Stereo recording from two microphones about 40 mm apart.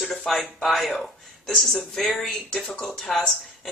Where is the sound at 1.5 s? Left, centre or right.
Centre.